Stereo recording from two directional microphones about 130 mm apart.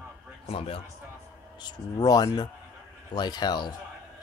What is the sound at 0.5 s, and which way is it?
Speech, 45° left (ahead or behind).